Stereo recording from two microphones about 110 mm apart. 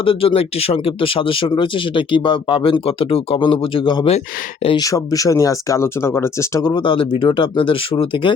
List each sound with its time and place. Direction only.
0.0 s speech: 55° left (ahead or behind)
4.8 s speech: 30° left (ahead or behind)
6.6 s speech: 40° left (ahead or behind)